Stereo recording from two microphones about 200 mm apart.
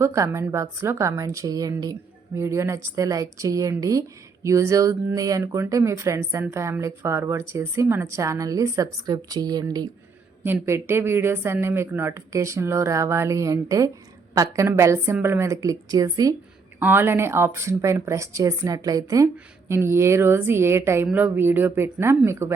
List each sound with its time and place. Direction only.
0.0 s speech: 15° right (ahead or behind)